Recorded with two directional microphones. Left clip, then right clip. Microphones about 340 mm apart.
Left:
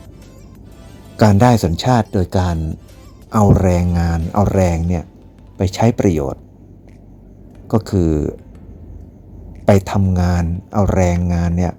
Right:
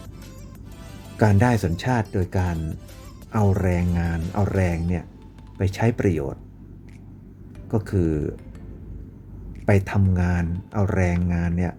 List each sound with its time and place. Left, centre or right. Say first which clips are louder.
1.1 s speech: left 8 dB; centre
7.7 s speech: left 7 dB; centre
9.6 s speech: left 8 dB; centre